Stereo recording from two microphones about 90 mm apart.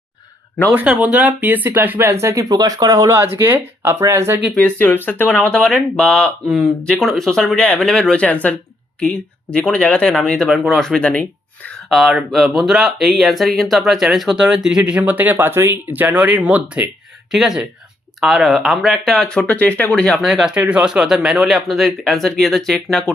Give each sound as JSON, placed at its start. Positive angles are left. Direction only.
{"t": 0.7, "sound": "speech", "side_deg": -10}
{"t": 3.5, "sound": "speech", "side_deg": -30}
{"t": 4.5, "sound": "speech", "side_deg": 15}
{"t": 11.9, "sound": "speech", "side_deg": -5}
{"t": 17.3, "sound": "speech", "side_deg": -5}
{"t": 20.2, "sound": "speech", "side_deg": -5}